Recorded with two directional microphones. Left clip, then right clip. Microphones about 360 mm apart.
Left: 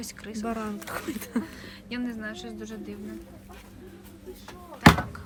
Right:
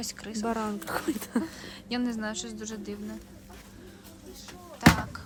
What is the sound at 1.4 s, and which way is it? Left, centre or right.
Speech, centre.